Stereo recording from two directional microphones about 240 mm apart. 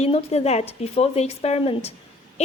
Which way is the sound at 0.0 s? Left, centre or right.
Left.